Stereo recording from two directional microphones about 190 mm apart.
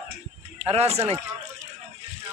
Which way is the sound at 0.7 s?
35° right (ahead or behind).